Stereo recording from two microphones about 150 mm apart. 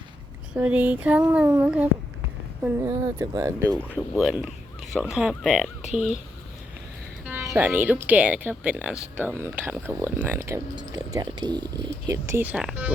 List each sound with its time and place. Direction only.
0.5 s speech: 10° right (ahead or behind)
4.1 s speech: centre (ahead or behind)
7.3 s speech: 15° right (ahead or behind)
10.8 s speech: 25° right (ahead or behind); by 12.9 s 5° right (ahead or behind)